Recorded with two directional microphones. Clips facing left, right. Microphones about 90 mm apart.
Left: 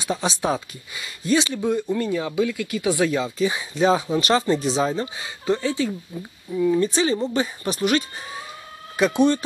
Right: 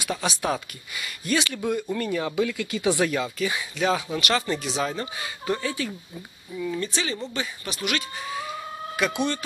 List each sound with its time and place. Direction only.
0.0 s speech: 25° left (ahead or behind)
6.9 s speech: 35° left (ahead or behind)